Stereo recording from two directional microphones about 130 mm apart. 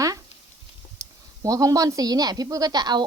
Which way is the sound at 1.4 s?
25° right (ahead or behind).